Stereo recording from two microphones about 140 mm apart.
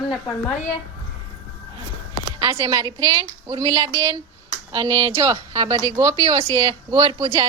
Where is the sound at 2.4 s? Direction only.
25° right (ahead or behind).